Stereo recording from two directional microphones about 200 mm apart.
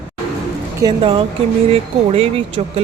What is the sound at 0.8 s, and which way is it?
Speech, 25° right (ahead or behind).